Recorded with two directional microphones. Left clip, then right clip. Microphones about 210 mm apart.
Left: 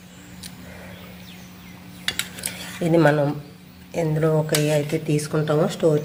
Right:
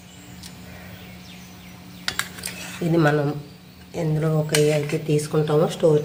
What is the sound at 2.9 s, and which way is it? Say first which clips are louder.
Speech: left 3 dB; 10° left (ahead or behind).